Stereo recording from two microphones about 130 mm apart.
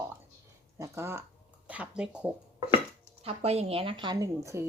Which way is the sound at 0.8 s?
20° right (ahead or behind).